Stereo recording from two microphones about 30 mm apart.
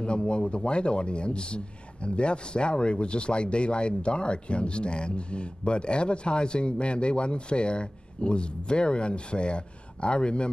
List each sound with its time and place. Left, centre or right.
0.7 s speech: left